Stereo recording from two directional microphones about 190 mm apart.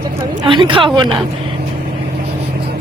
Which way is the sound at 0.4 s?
25° right (ahead or behind).